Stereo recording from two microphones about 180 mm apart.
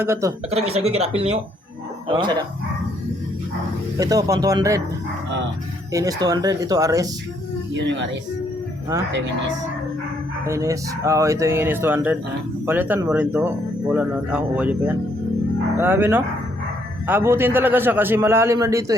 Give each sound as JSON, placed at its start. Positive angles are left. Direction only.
{"t": 0.0, "sound": "speech", "side_deg": -15}
{"t": 0.5, "sound": "speech", "side_deg": -35}
{"t": 3.9, "sound": "speech", "side_deg": -20}
{"t": 5.9, "sound": "speech", "side_deg": -20}
{"t": 7.7, "sound": "speech", "side_deg": -90}
{"t": 10.4, "sound": "speech", "side_deg": -15}
{"t": 15.8, "sound": "speech", "side_deg": -10}